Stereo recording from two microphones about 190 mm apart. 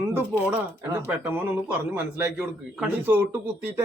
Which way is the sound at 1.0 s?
10° right (ahead or behind).